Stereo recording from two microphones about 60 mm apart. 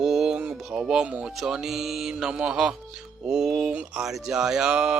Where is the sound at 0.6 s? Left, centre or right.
Centre.